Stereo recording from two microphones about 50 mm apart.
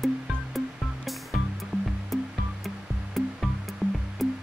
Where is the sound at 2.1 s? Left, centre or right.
Centre.